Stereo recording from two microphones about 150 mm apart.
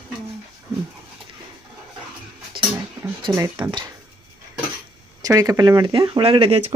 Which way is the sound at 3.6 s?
30° right (ahead or behind).